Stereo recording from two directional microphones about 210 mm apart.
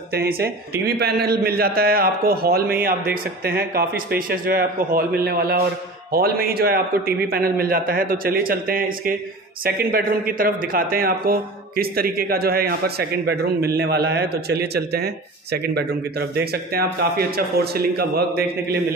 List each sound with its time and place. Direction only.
0.1 s speech: 50° right (ahead or behind)